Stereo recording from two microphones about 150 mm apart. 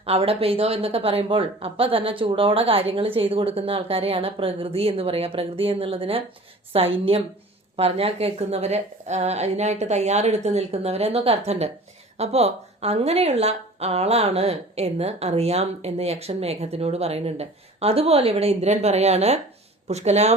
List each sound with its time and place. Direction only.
0.0 s a woman's voice: 40° right (ahead or behind)